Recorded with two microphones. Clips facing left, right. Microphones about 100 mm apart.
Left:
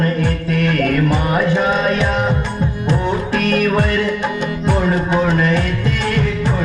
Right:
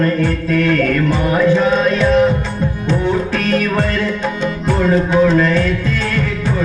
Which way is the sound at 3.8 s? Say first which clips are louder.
Left 1 dB; 15° left (ahead or behind).